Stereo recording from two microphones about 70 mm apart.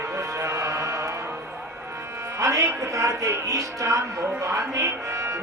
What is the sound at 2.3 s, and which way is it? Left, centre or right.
Speech, right.